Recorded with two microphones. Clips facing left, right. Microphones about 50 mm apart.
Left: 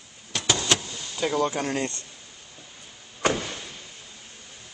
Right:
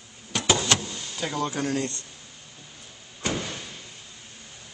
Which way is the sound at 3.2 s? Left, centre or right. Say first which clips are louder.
Left 5 dB; left.